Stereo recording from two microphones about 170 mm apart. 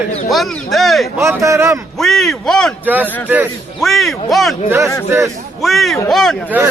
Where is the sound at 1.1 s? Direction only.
15° right (ahead or behind).